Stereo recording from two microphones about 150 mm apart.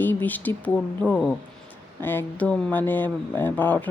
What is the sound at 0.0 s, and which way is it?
Speech, 10° left (ahead or behind).